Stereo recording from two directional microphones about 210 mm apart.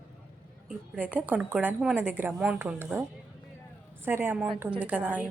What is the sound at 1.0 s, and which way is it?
Speech, 5° right (ahead or behind).